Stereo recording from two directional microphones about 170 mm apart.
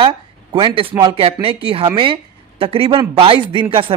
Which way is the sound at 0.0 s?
30° right (ahead or behind).